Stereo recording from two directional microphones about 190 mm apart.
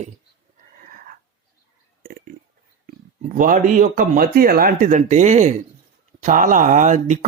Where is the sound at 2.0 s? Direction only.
50° right (ahead or behind).